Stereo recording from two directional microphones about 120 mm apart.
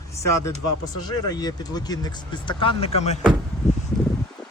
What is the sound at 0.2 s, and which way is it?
Speech, 25° left (ahead or behind).